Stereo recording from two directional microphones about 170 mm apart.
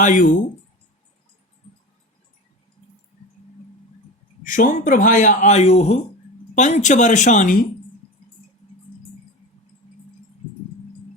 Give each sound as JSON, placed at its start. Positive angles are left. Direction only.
{"t": 0.0, "sound": "speech", "side_deg": 50}
{"t": 4.4, "sound": "speech", "side_deg": 50}